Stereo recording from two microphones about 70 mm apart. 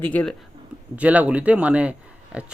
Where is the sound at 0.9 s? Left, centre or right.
Right.